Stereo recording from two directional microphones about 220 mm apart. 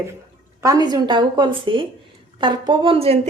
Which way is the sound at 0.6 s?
15° right (ahead or behind).